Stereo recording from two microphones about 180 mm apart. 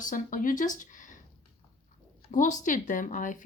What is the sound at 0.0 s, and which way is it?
Speech, 45° left (ahead or behind).